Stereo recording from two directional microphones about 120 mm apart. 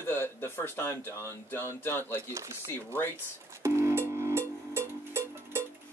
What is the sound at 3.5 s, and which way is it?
Music, 25° right (ahead or behind).